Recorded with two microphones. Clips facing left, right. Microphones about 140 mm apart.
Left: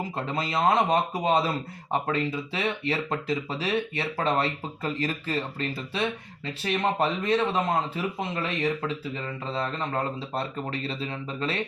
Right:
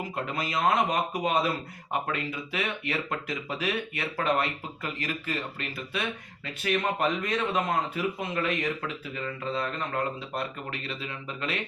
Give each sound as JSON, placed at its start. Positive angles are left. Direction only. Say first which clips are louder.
{"t": 0.2, "sound": "speech", "louder": "left 2 dB", "side_deg": 30}